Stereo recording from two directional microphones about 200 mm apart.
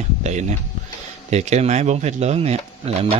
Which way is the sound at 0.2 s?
35° right (ahead or behind).